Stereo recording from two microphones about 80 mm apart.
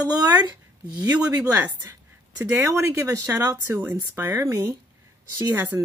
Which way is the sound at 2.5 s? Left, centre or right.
Right.